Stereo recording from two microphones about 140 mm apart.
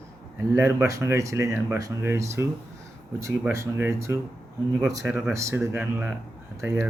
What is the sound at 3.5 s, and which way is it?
Speech, 15° right (ahead or behind).